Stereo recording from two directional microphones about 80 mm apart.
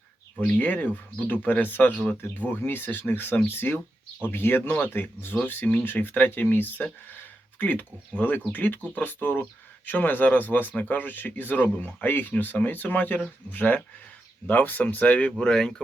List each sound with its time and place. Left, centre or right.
0.3 s speech: centre